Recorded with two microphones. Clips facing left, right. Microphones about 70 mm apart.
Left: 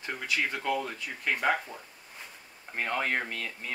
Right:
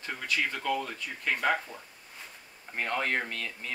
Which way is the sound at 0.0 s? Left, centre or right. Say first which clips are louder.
Even; centre.